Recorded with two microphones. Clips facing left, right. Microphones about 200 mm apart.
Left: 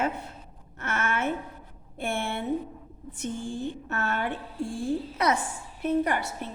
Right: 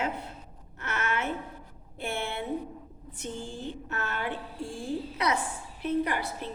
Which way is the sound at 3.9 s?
50° left (ahead or behind).